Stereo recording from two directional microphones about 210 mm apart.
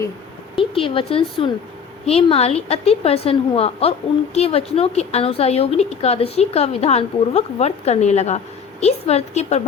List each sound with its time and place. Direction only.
0.5 s a woman's voice: 25° left (ahead or behind)